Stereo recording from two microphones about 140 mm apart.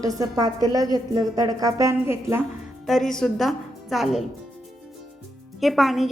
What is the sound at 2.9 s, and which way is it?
A woman's voice, centre (ahead or behind).